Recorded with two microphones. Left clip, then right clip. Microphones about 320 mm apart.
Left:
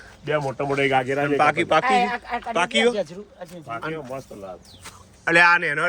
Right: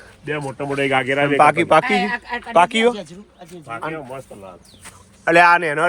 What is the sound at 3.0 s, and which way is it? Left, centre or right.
Speech, centre.